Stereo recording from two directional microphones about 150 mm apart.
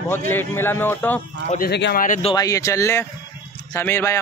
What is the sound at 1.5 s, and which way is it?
Speech, 80° left.